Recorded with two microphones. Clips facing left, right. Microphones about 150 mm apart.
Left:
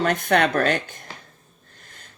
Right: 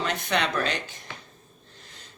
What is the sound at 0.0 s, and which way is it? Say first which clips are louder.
Speech: left 7 dB; 50° left (ahead or behind).